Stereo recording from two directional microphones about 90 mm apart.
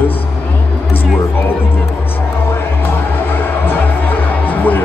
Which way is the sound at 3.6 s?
20° left (ahead or behind).